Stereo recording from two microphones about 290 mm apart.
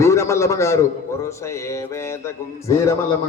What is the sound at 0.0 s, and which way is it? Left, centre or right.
A man's voice, centre.